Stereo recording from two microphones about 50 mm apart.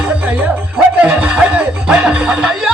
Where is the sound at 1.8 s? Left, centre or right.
Centre.